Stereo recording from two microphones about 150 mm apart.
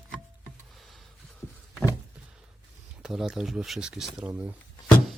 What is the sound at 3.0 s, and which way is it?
Speech, 5° right (ahead or behind).